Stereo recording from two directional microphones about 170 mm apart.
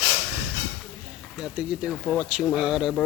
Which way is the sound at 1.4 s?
5° right (ahead or behind).